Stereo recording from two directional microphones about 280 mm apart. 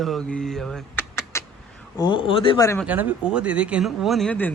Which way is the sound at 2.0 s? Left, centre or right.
Centre.